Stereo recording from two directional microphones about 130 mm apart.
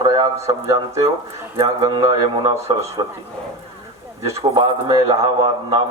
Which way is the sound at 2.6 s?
50° right (ahead or behind).